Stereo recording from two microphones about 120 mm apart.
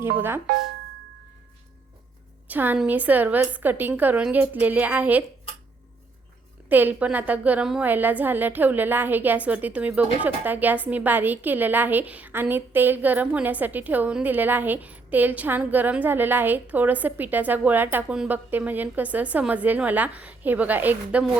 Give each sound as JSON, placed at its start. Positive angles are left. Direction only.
{"t": 0.2, "sound": "a woman's voice", "side_deg": -20}
{"t": 2.5, "sound": "a woman's voice", "side_deg": -15}
{"t": 6.7, "sound": "a woman's voice", "side_deg": -15}